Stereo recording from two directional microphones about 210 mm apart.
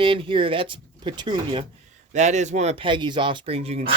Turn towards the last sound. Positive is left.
turn(degrees=-30)  # may be behind; listen again after turning